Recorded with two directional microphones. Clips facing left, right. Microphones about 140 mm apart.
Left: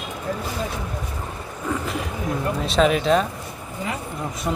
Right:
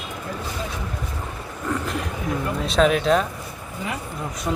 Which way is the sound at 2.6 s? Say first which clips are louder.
Even; centre (ahead or behind).